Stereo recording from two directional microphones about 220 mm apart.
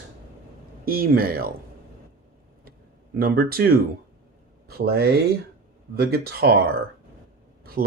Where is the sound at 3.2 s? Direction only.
45° right (ahead or behind).